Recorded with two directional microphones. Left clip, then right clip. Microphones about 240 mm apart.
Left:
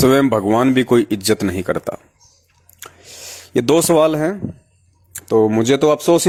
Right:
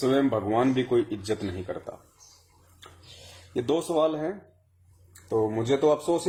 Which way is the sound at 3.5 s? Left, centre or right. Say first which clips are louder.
Left 12 dB; left.